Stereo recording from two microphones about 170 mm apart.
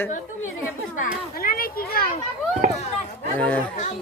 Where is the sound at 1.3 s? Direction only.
60° left (ahead or behind).